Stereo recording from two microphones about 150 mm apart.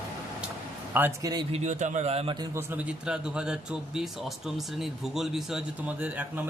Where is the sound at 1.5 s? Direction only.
50° right (ahead or behind).